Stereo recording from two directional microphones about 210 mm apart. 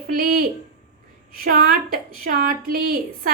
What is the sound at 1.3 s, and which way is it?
A woman's voice, 45° right (ahead or behind).